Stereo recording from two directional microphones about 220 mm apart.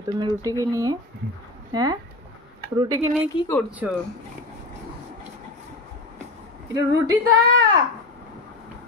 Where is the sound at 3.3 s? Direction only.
20° left (ahead or behind).